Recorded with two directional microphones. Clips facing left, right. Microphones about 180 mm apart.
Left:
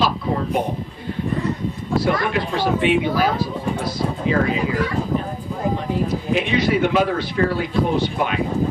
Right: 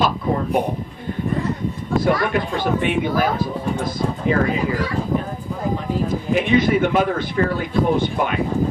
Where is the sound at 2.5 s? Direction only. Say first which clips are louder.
Left 2 dB; 50° right (ahead or behind).